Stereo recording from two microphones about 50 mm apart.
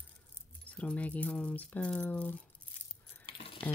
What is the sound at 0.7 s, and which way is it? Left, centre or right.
Speech, left.